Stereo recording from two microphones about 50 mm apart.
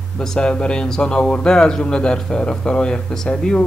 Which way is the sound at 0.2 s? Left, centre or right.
Centre.